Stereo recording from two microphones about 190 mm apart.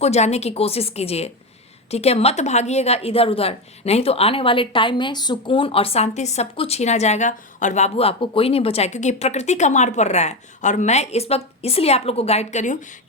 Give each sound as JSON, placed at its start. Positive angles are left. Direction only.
{"t": 0.0, "sound": "a woman's voice", "side_deg": 35}